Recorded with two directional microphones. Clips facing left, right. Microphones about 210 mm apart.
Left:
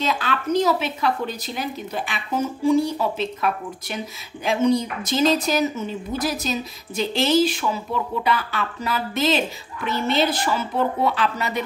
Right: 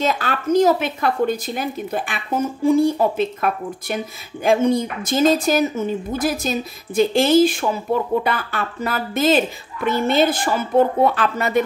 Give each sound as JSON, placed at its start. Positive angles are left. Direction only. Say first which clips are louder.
{"t": 0.0, "sound": "speech", "louder": "right 3 dB", "side_deg": -45}